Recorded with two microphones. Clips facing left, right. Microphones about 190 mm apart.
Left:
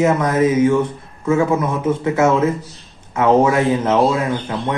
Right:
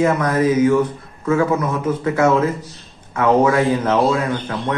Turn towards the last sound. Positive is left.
turn(degrees=25)  # may be behind; listen again after turning